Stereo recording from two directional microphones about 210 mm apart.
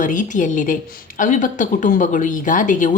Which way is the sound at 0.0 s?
40° left (ahead or behind).